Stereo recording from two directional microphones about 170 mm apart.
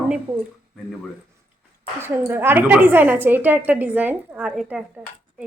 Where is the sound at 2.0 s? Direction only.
15° right (ahead or behind).